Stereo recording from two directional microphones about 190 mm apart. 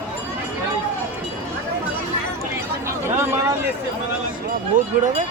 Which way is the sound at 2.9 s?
10° right (ahead or behind).